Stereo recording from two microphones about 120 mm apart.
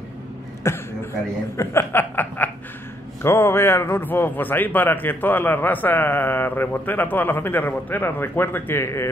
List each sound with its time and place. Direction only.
0.7 s speech: 20° left (ahead or behind)